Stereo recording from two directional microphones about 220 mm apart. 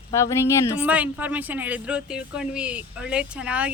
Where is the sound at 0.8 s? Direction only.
5° right (ahead or behind).